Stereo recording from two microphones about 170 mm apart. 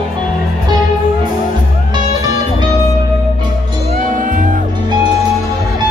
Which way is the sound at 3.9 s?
50° right (ahead or behind).